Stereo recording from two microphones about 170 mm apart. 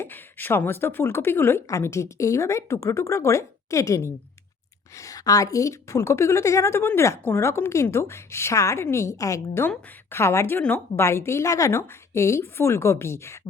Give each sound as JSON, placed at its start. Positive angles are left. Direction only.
{"t": 0.0, "sound": "a woman's voice", "side_deg": 10}